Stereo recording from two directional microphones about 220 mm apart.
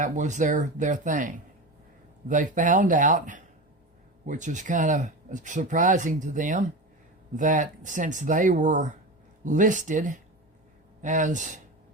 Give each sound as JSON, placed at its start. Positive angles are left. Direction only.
{"t": 0.0, "sound": "speech", "side_deg": -35}